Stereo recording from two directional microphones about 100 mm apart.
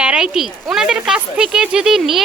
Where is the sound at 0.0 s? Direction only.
10° right (ahead or behind).